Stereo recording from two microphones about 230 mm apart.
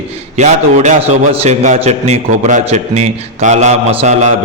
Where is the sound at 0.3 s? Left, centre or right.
Right.